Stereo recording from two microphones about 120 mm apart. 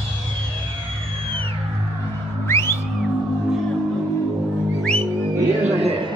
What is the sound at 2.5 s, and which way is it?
Music, 20° left (ahead or behind).